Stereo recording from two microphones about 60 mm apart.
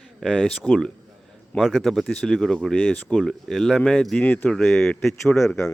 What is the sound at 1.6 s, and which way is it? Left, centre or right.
Speech, centre.